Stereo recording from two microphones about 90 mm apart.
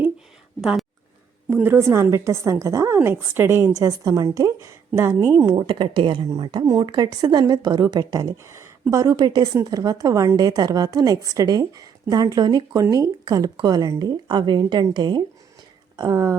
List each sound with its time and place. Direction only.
0.6 s speech: 5° right (ahead or behind)
1.6 s a woman's voice: 25° right (ahead or behind)
5.5 s a woman's voice: 60° right (ahead or behind)
6.3 s a woman's voice: 55° right (ahead or behind)
12.7 s a woman's voice: 35° right (ahead or behind); by 15.2 s 55° right (ahead or behind)
16.0 s a woman's voice: 40° right (ahead or behind)